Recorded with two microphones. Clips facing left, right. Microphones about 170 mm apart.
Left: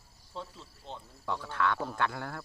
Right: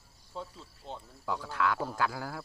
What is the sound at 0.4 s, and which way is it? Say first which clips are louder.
Cricket: right 1 dB; 5° right (ahead or behind).